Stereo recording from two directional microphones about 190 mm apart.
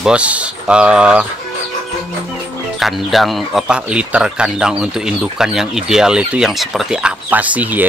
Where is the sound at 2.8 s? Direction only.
Centre (ahead or behind).